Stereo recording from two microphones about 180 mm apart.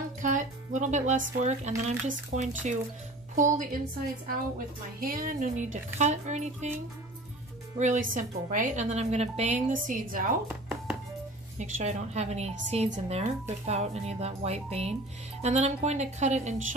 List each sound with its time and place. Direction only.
0.2 s speech: 45° right (ahead or behind)
4.3 s speech: 55° right (ahead or behind)
7.8 s speech: 40° right (ahead or behind)
10.5 s music: 5° right (ahead or behind)
11.6 s speech: 40° right (ahead or behind)